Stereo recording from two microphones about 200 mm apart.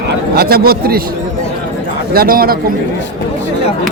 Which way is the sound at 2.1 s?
45° right (ahead or behind).